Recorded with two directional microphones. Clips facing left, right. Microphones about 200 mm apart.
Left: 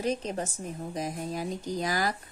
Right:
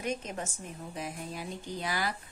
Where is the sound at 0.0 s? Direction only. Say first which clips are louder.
Left 5 dB; 35° left (ahead or behind).